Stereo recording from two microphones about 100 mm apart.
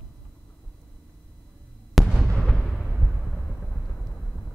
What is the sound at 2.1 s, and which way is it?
Fireworks, centre (ahead or behind).